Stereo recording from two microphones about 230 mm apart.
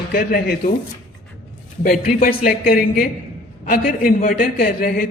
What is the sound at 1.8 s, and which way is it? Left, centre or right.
Speech, left.